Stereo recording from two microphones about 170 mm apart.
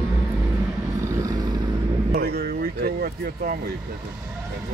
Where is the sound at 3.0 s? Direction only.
55° right (ahead or behind).